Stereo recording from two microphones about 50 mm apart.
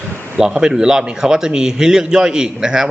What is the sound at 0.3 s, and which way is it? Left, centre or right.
A man's voice, centre.